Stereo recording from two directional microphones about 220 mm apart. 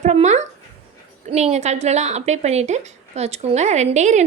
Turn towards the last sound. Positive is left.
turn(degrees=-30)  # may be behind; listen again after turning